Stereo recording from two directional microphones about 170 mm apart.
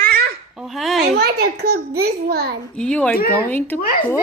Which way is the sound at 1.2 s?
70° right (ahead or behind).